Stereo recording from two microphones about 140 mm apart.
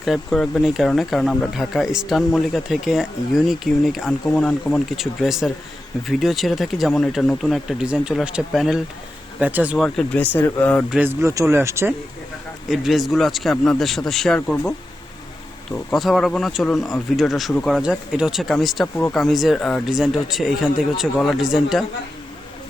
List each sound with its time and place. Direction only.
0.0 s a man's voice: centre (ahead or behind)
9.7 s speech: centre (ahead or behind)
10.8 s a man's voice: 10° right (ahead or behind)
12.6 s speech: centre (ahead or behind)
15.7 s speech: centre (ahead or behind)